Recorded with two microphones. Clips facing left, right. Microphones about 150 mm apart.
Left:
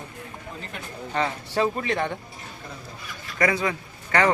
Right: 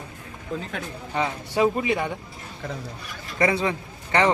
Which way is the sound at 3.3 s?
25° right (ahead or behind).